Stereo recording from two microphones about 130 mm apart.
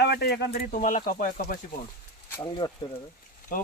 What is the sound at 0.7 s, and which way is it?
Speech, 85° left.